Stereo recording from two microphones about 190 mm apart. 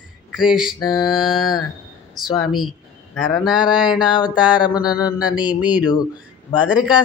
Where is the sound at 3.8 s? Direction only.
25° left (ahead or behind).